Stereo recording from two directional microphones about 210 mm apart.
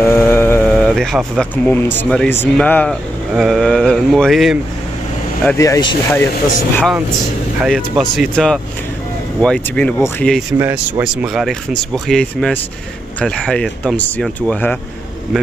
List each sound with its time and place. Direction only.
0.0 s speech: 10° left (ahead or behind)
5.4 s speech: 10° left (ahead or behind)
7.6 s speech: centre (ahead or behind)
10.6 s speech: 10° right (ahead or behind)